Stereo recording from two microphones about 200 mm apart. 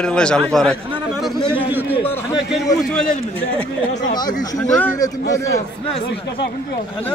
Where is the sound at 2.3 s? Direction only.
Centre (ahead or behind).